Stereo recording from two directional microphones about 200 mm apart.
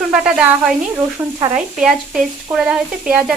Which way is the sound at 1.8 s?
Centre (ahead or behind).